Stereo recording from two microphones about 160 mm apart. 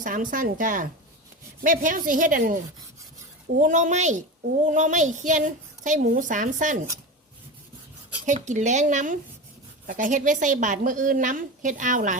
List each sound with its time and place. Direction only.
0.0 s a woman's voice: 55° right (ahead or behind)
3.6 s a woman's voice: 50° right (ahead or behind)
8.2 s a woman's voice: 50° right (ahead or behind)